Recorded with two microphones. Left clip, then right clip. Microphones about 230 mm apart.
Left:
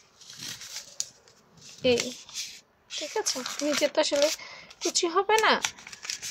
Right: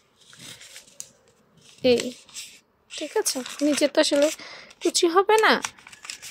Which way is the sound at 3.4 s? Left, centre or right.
Centre.